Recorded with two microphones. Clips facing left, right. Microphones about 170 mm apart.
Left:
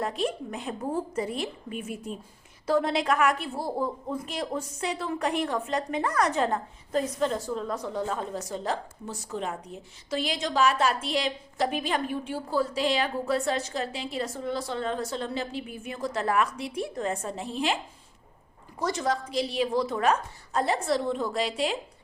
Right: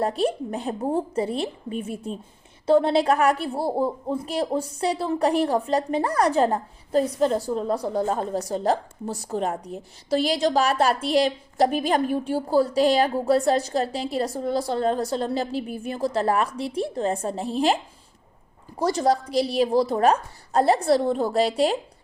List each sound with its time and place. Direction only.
0.0 s a woman's voice: 35° right (ahead or behind)
18.8 s a woman's voice: 35° right (ahead or behind)